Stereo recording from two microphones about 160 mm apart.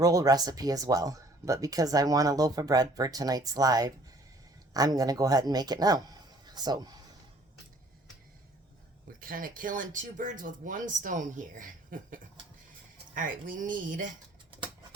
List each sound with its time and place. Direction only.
0.0 s speech: 20° right (ahead or behind)
9.2 s speech: 60° right (ahead or behind)